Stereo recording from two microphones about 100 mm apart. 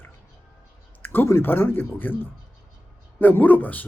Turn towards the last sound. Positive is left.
turn(degrees=15)  # may be behind; listen again after turning